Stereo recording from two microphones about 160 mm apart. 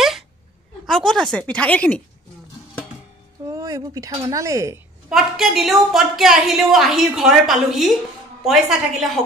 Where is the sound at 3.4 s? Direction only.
20° right (ahead or behind).